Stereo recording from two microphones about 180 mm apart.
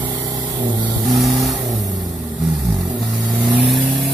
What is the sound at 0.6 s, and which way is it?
Vehicle, 25° right (ahead or behind).